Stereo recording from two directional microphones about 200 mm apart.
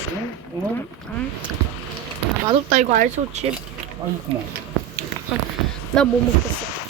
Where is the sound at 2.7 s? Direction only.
35° right (ahead or behind).